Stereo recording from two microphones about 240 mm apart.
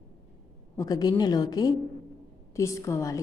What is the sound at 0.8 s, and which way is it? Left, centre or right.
A woman's voice, centre.